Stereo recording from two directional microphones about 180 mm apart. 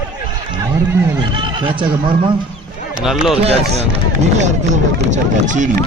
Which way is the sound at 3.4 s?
35° right (ahead or behind).